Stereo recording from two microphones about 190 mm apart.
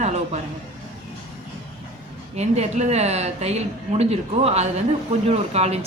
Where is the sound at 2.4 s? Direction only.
35° right (ahead or behind).